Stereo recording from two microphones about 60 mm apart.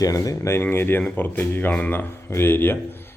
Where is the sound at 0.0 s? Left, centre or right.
Left.